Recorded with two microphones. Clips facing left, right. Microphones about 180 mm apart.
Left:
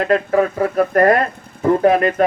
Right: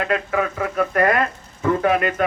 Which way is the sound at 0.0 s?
40° left (ahead or behind).